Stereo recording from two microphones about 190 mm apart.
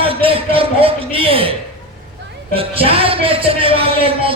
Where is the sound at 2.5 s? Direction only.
30° right (ahead or behind).